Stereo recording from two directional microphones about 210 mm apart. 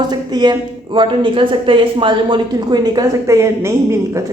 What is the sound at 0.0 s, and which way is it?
A woman's voice, 20° right (ahead or behind).